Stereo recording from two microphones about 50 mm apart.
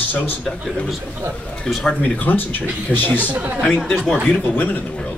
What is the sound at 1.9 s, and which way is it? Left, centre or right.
Speech, left.